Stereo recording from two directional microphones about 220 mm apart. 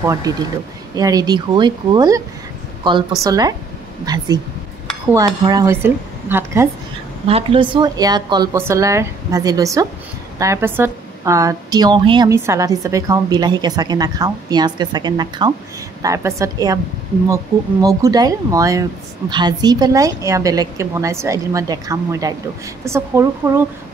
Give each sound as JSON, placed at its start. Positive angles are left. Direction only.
{"t": 0.0, "sound": "a woman's voice", "side_deg": -15}
{"t": 3.3, "sound": "a woman's voice", "side_deg": -15}
{"t": 7.2, "sound": "a woman's voice", "side_deg": -25}
{"t": 17.8, "sound": "a woman's voice", "side_deg": -15}